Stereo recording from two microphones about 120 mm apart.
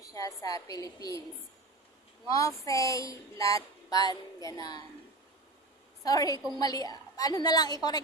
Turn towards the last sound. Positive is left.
turn(degrees=35)  # may be behind; listen again after turning